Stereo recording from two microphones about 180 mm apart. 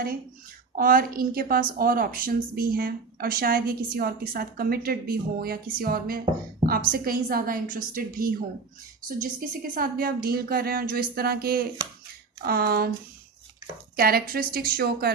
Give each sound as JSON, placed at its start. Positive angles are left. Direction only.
{"t": 0.8, "sound": "a woman's voice", "side_deg": -50}
{"t": 13.9, "sound": "a woman's voice", "side_deg": -55}